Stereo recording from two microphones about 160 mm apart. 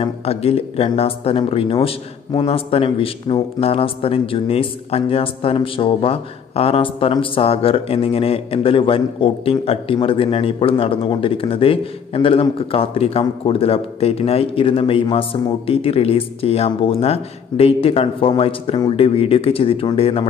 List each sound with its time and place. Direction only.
0.0 s speech: 40° left (ahead or behind)